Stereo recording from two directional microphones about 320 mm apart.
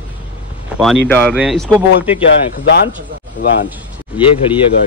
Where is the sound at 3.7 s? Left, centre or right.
Centre.